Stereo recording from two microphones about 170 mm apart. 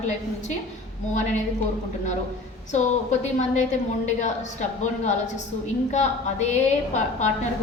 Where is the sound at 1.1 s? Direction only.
45° left (ahead or behind).